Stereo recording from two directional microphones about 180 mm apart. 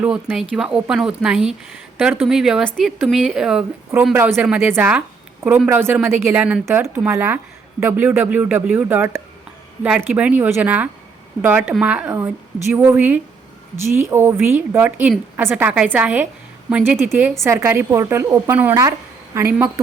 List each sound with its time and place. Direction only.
0.0 s a woman's voice: 5° right (ahead or behind)